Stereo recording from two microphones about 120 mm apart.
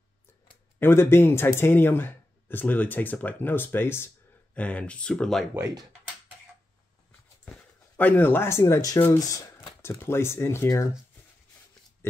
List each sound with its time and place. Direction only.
0.7 s speech: 20° left (ahead or behind)
8.0 s speech: 15° left (ahead or behind)
12.0 s oink: 20° left (ahead or behind)